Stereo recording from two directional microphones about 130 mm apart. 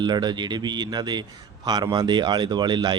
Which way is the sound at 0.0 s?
35° right (ahead or behind).